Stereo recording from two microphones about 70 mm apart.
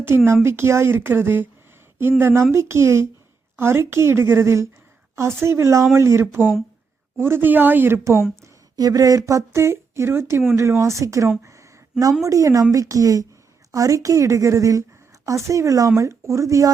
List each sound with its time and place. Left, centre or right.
0.1 s speech: right
8.7 s speech: right